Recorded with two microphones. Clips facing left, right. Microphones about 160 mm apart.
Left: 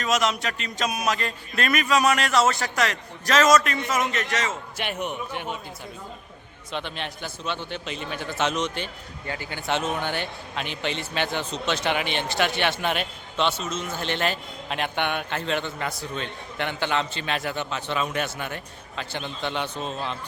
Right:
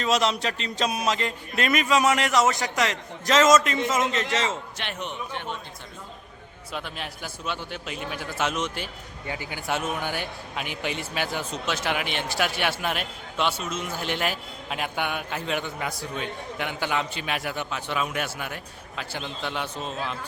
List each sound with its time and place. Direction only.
0.0 s speech: 30° right (ahead or behind)
4.8 s a man's voice: 10° left (ahead or behind)
6.7 s a man's voice: 5° right (ahead or behind)